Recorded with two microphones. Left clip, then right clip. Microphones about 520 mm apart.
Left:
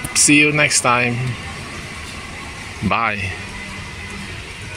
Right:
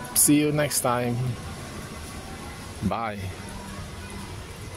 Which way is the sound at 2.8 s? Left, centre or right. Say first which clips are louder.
Left 11 dB; right.